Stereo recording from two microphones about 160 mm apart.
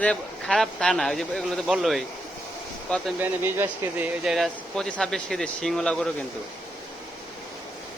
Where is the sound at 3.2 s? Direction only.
10° right (ahead or behind).